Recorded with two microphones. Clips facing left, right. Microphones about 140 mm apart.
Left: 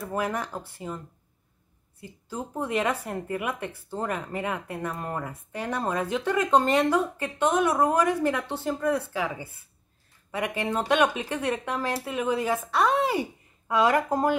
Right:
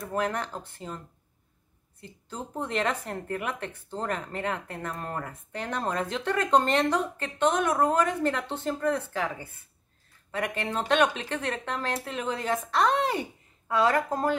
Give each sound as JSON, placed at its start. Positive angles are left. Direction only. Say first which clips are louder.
{"t": 0.0, "sound": "speech", "louder": "even", "side_deg": 5}